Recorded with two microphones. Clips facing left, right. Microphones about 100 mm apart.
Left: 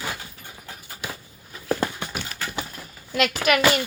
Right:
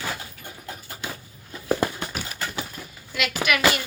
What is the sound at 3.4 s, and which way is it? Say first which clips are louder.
Speech: left 2 dB; 15° right (ahead or behind).